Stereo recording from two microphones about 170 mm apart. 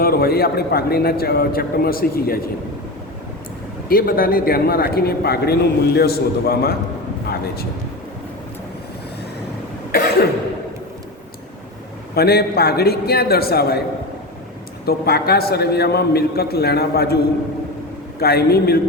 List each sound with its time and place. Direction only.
0.0 s speech: 60° left (ahead or behind)
3.8 s speech: 60° left (ahead or behind)
12.1 s speech: 65° left (ahead or behind)
14.8 s a man's voice: 65° left (ahead or behind)
18.2 s a man's voice: 65° left (ahead or behind)